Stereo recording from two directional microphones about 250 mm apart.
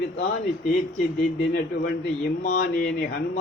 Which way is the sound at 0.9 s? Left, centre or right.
Left.